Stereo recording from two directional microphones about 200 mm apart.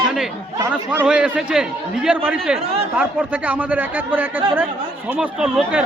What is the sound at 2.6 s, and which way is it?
Speech, 30° right (ahead or behind).